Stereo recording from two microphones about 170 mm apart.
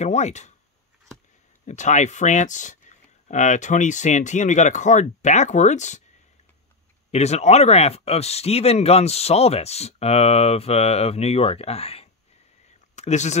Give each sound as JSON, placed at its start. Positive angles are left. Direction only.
{"t": 0.0, "sound": "speech", "side_deg": 45}
{"t": 1.7, "sound": "speech", "side_deg": 45}
{"t": 7.1, "sound": "speech", "side_deg": 40}